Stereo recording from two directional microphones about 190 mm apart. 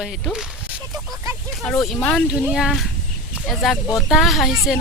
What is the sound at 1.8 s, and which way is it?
Speech, 5° left (ahead or behind).